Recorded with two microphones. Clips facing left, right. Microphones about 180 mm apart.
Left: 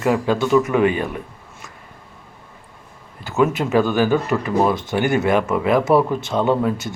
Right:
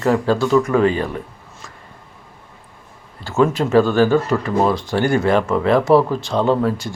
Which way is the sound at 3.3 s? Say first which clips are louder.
Right 2 dB; 20° left (ahead or behind).